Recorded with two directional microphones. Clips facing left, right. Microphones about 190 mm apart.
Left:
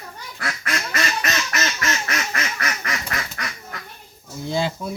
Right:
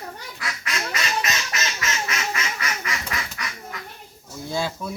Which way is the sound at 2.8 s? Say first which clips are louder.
Left 2 dB; 40° left (ahead or behind).